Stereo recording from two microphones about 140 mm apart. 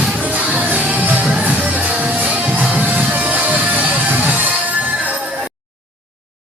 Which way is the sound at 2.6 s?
10° right (ahead or behind).